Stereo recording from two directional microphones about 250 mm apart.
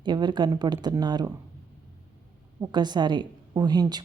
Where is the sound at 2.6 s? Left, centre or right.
Centre.